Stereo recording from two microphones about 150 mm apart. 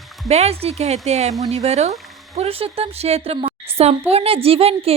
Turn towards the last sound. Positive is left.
turn(degrees=-40)  # may be behind; listen again after turning